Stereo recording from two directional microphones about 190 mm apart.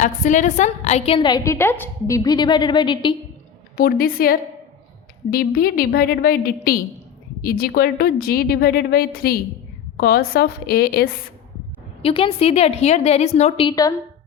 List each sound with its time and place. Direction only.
0.0 s a woman's voice: 40° left (ahead or behind); by 3.2 s 25° left (ahead or behind)
3.8 s a woman's voice: 50° left (ahead or behind)
12.0 s a woman's voice: 30° left (ahead or behind)
13.7 s a woman's voice: 20° left (ahead or behind)